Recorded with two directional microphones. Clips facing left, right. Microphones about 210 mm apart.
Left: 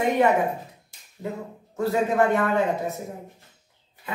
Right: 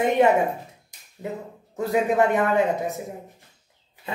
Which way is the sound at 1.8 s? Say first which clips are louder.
Right 1 dB; 15° right (ahead or behind).